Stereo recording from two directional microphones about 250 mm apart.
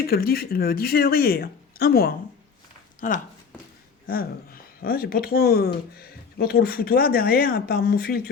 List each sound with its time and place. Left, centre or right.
0.0 s speech: left